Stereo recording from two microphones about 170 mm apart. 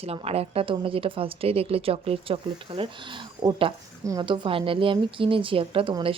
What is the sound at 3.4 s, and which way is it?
Speech, 20° right (ahead or behind).